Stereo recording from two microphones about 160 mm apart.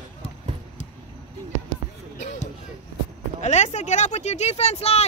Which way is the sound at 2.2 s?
45° left (ahead or behind).